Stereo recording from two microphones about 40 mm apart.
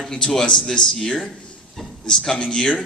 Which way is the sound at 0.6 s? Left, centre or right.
Centre.